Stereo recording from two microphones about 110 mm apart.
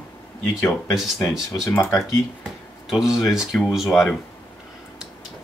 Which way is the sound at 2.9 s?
5° right (ahead or behind).